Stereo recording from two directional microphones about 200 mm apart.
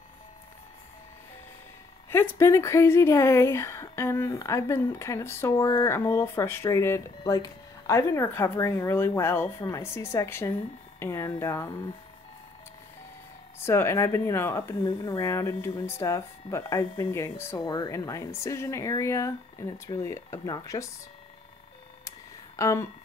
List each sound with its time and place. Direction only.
2.0 s speech: 10° left (ahead or behind)
13.6 s speech: 10° left (ahead or behind)
22.6 s speech: 15° left (ahead or behind)